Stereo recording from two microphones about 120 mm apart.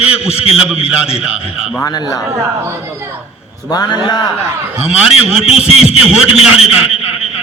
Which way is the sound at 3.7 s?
35° left (ahead or behind).